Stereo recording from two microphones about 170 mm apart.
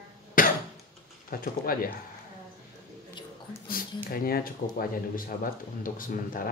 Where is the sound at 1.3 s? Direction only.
60° left (ahead or behind).